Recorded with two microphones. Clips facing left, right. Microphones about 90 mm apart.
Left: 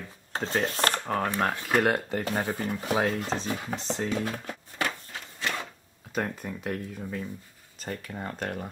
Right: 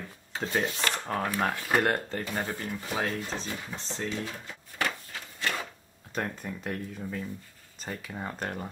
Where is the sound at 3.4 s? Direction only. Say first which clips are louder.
Left 6 dB; 70° left (ahead or behind).